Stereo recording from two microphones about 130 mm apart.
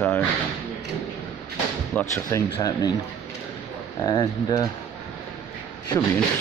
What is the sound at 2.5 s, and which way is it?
Speech, 30° left (ahead or behind).